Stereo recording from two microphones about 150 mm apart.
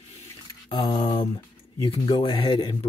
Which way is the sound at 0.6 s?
35° left (ahead or behind).